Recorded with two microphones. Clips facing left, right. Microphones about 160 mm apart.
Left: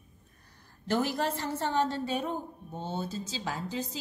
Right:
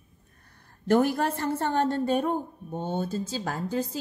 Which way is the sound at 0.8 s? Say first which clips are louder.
Right 6 dB; 55° right (ahead or behind).